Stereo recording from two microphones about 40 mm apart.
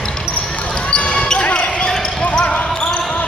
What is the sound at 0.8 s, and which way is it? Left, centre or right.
Basketball bounce, left.